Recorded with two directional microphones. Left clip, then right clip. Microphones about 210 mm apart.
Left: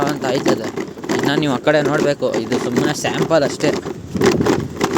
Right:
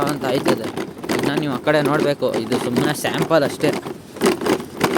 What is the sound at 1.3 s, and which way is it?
Speech, 20° left (ahead or behind).